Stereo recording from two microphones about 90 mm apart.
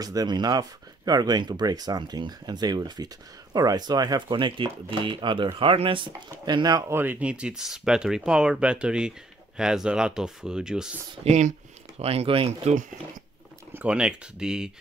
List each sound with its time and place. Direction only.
0.0 s speech: 45° right (ahead or behind); by 5.5 s 65° right (ahead or behind)
5.6 s speech: 80° right
6.4 s speech: 50° right (ahead or behind)
6.9 s speech: 20° right (ahead or behind)
12.1 s speech: 90° right
13.7 s speech: 10° right (ahead or behind)